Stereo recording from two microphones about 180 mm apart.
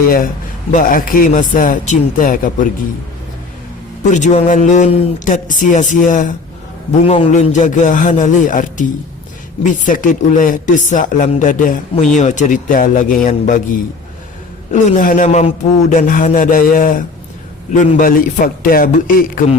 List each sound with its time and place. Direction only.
0.7 s speech: 50° left (ahead or behind)
4.1 s speech: 40° left (ahead or behind)